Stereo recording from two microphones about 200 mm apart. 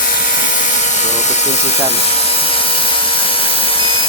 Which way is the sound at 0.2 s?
40° left (ahead or behind).